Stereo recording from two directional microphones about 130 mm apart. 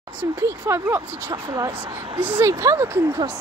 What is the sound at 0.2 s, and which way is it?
Speech, 20° right (ahead or behind).